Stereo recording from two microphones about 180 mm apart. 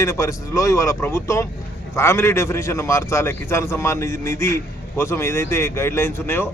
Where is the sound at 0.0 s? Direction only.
15° left (ahead or behind).